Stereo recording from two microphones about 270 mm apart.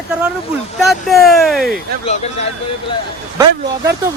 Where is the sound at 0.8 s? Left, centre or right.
Centre.